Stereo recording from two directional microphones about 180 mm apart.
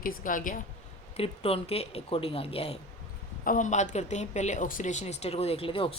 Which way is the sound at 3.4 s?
45° left (ahead or behind).